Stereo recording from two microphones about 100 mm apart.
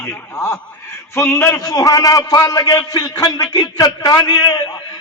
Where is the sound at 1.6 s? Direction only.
35° left (ahead or behind).